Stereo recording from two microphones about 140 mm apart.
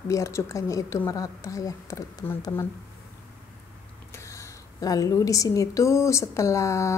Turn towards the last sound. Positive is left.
turn(degrees=20)  # may be behind; listen again after turning